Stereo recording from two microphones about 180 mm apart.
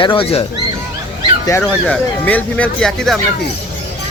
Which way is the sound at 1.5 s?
10° left (ahead or behind).